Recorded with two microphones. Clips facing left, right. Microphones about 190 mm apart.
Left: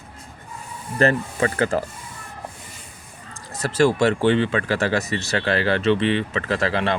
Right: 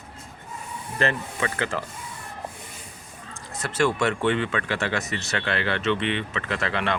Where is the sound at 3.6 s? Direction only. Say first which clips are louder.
Left 5 dB; 35° left (ahead or behind).